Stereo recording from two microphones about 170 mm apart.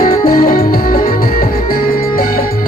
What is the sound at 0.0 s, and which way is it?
Music, 55° left (ahead or behind).